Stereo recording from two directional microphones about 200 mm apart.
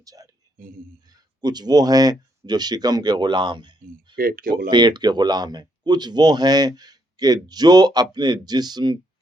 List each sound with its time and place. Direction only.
0.0 s speech: 20° right (ahead or behind)
1.4 s speech: 20° right (ahead or behind)
4.2 s speech: 45° right (ahead or behind)
4.7 s speech: 20° right (ahead or behind)